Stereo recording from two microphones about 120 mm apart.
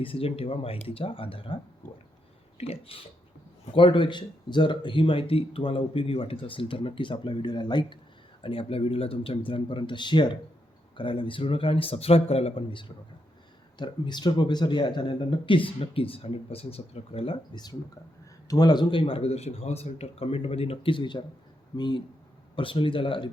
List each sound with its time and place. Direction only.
0.0 s speech: 50° left (ahead or behind)
2.6 s speech: 55° left (ahead or behind)
13.7 s speech: 40° left (ahead or behind); by 17.3 s 55° left (ahead or behind)
17.5 s speech: 35° left (ahead or behind)